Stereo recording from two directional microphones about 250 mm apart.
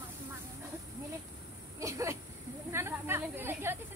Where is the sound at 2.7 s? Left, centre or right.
Centre.